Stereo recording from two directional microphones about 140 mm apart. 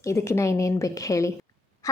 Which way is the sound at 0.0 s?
20° left (ahead or behind).